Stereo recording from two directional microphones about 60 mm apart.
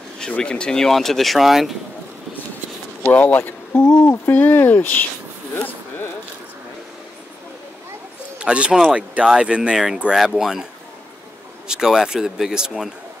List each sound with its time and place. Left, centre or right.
0.4 s speech: centre
3.1 s speech: left
8.4 s speech: centre